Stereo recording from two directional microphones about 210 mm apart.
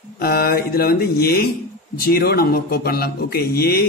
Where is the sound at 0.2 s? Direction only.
50° left (ahead or behind).